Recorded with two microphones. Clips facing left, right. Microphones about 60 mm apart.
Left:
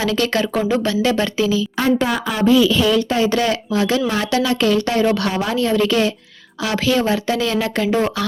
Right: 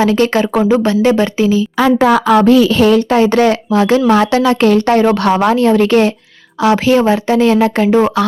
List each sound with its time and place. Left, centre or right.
0.0 s speech: right
2.0 s speech: right